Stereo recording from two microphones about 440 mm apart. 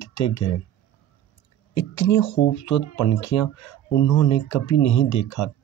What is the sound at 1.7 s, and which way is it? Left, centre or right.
Speech, left.